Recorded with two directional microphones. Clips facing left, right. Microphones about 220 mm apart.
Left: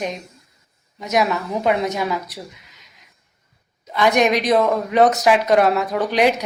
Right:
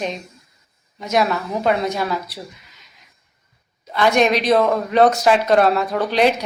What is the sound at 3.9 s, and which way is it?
A woman's voice, 15° left (ahead or behind).